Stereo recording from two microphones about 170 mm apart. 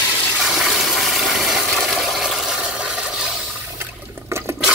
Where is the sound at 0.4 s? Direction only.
Centre (ahead or behind).